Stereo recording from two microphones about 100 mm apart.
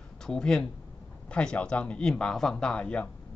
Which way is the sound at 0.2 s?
5° left (ahead or behind).